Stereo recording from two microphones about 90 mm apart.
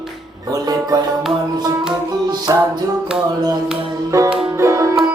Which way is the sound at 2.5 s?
40° right (ahead or behind).